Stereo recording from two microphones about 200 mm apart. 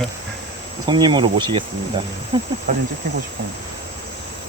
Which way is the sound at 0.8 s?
20° right (ahead or behind).